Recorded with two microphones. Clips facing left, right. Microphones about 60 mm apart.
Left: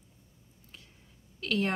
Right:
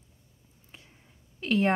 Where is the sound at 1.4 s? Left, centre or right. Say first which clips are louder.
Right 5 dB; right.